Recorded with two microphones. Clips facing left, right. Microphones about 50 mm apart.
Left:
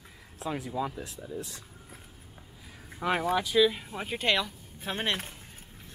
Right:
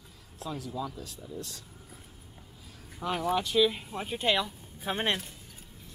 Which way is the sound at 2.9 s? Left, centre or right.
Left.